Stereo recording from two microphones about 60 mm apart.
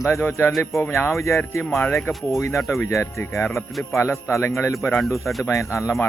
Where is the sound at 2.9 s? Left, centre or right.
Left.